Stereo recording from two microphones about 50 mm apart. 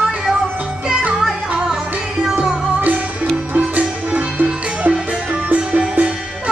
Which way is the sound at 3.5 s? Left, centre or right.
Right.